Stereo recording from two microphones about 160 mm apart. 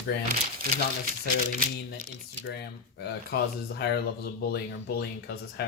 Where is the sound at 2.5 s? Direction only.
90° left.